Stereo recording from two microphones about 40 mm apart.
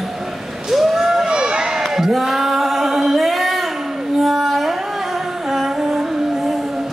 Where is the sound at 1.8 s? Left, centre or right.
Centre.